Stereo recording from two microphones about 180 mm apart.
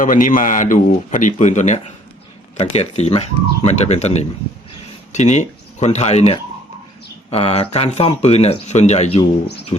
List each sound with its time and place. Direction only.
0.0 s speech: 50° left (ahead or behind)